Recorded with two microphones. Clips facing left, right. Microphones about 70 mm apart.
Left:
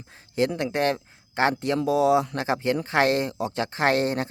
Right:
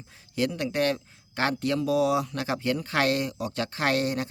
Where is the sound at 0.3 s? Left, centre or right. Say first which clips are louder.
Left 3 dB; left.